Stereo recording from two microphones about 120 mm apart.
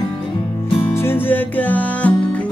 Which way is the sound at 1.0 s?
15° left (ahead or behind).